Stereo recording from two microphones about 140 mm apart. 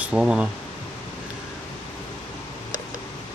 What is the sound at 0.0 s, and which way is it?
Speech, 5° right (ahead or behind).